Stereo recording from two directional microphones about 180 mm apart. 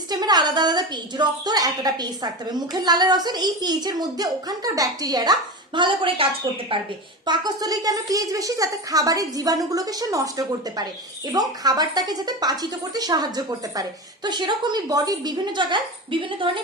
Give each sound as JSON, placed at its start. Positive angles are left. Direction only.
{"t": 0.1, "sound": "a woman's voice", "side_deg": -20}